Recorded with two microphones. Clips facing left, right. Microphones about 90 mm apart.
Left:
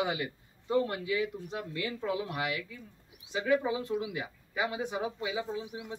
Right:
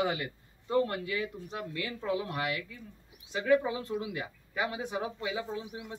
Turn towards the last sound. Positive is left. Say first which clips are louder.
# left 1 dB
turn(degrees=20)  # may be behind; listen again after turning